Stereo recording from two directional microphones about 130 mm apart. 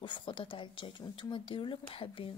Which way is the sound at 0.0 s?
40° left (ahead or behind).